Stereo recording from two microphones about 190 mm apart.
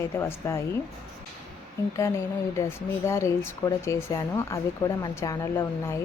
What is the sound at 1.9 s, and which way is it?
Speech, 15° left (ahead or behind).